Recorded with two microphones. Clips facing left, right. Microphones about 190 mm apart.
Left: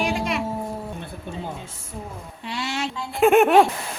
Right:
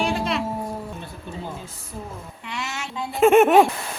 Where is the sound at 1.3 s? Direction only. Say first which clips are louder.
Left 2 dB; 55° left (ahead or behind).